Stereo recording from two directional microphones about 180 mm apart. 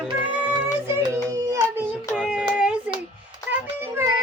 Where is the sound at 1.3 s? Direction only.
15° right (ahead or behind).